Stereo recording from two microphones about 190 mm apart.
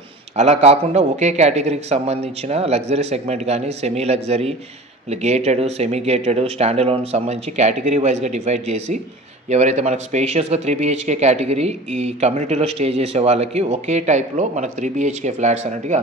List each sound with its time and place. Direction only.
0.4 s a man's voice: 35° right (ahead or behind)